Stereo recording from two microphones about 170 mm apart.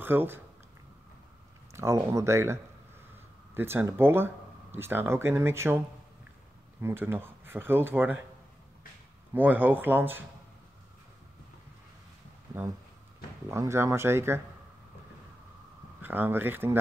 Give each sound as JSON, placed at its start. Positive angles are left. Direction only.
{"t": 0.0, "sound": "speech", "side_deg": -10}
{"t": 1.7, "sound": "speech", "side_deg": -15}
{"t": 6.8, "sound": "speech", "side_deg": -15}
{"t": 9.3, "sound": "speech", "side_deg": -10}
{"t": 13.5, "sound": "speech", "side_deg": -15}
{"t": 16.0, "sound": "speech", "side_deg": -10}